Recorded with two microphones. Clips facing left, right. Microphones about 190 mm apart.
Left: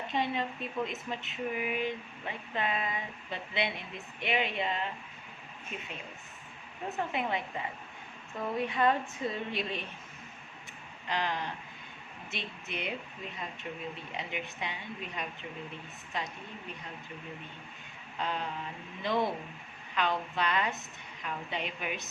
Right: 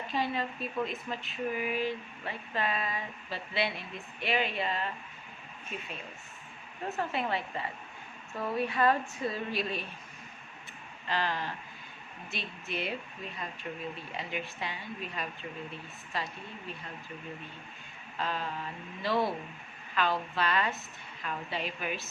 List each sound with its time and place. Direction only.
0.1 s speech: 20° left (ahead or behind)
6.9 s speech: 15° left (ahead or behind)
11.1 s speech: 20° left (ahead or behind)
18.2 s speech: 20° left (ahead or behind)